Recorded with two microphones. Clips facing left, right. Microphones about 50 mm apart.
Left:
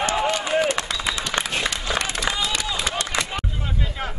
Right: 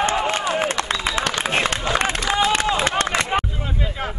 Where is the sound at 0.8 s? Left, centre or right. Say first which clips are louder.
Right 4 dB; right.